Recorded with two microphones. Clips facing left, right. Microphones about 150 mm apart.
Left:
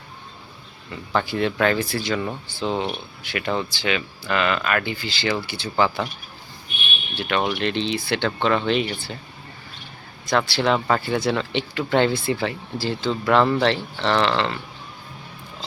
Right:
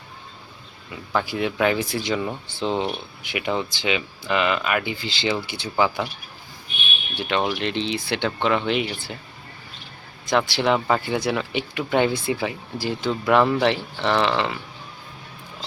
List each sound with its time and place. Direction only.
0.9 s speech: 10° right (ahead or behind)
7.2 s speech: 20° right (ahead or behind)
10.2 s speech: 15° right (ahead or behind)